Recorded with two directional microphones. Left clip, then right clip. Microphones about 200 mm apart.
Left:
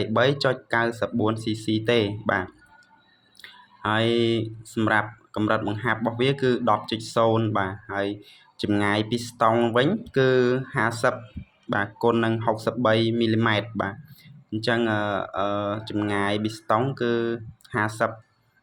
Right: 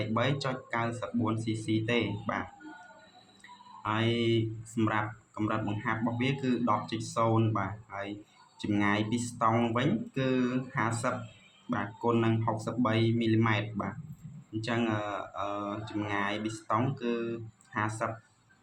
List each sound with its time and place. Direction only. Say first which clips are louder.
0.0 s speech: left 10 dB; 30° left (ahead or behind)
3.8 s speech: left 8 dB; 35° left (ahead or behind)